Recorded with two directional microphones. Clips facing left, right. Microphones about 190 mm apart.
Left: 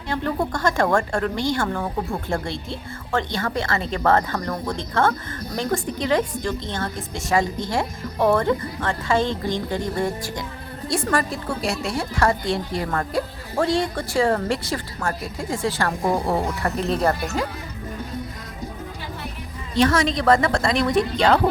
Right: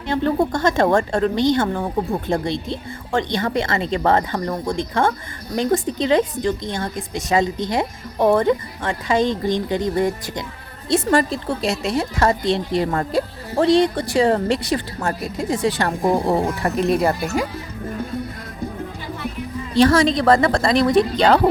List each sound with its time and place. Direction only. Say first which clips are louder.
0.1 s a woman's voice: right 5 dB; 25° right (ahead or behind)
19.7 s speech: right 5 dB; 35° right (ahead or behind)